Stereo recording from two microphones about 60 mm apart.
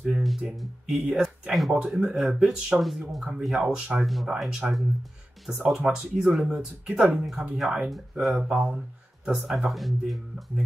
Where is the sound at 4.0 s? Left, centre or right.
Centre.